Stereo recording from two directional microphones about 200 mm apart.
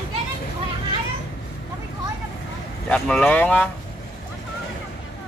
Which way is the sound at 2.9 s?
5° left (ahead or behind).